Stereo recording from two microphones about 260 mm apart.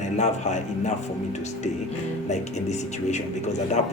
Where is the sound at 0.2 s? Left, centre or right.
Left.